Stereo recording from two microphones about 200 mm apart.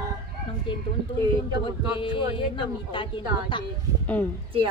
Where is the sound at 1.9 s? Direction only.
25° left (ahead or behind).